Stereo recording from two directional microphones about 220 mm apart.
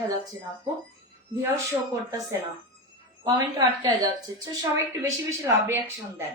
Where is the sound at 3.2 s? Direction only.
15° right (ahead or behind).